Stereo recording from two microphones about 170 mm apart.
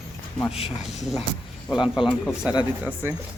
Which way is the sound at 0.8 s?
Centre (ahead or behind).